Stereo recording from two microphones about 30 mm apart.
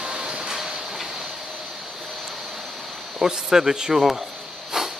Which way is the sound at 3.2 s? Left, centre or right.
Centre.